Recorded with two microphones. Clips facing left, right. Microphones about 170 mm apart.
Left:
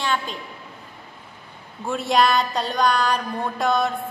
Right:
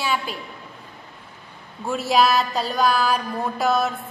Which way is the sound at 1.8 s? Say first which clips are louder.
Even; centre (ahead or behind).